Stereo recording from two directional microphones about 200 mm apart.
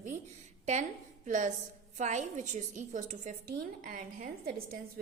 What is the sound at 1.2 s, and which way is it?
A woman's voice, 40° right (ahead or behind).